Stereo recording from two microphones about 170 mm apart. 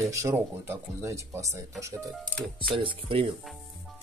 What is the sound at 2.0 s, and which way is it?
Speech, 5° left (ahead or behind).